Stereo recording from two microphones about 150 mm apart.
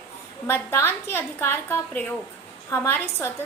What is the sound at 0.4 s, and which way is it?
A woman's voice, 15° left (ahead or behind).